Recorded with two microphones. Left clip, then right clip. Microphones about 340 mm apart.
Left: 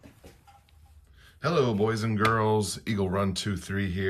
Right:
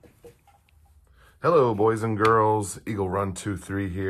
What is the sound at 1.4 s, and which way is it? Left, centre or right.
Speech, centre.